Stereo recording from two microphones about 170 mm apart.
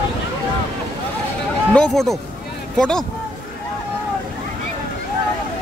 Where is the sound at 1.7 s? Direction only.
5° left (ahead or behind).